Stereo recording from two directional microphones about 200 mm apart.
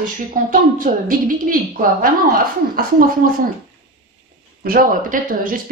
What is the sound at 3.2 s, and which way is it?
Speech, 45° right (ahead or behind).